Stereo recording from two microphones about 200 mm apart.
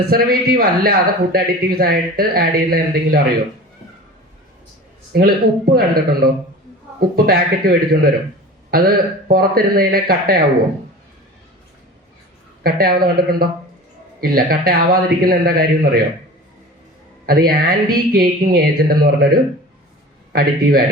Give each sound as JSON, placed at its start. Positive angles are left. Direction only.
{"t": 0.1, "sound": "a man's voice", "side_deg": -50}
{"t": 5.1, "sound": "a man's voice", "side_deg": -50}
{"t": 12.6, "sound": "a man's voice", "side_deg": -50}
{"t": 17.2, "sound": "a man's voice", "side_deg": -50}